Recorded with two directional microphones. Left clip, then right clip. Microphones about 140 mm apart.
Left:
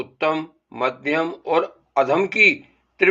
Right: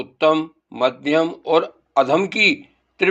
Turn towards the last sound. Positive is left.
turn(degrees=-35)  # may be behind; listen again after turning